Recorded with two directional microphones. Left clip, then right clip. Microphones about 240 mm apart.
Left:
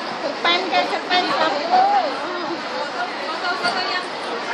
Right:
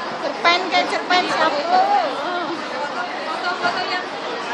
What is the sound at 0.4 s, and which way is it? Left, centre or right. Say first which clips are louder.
Speech: right 2 dB; centre.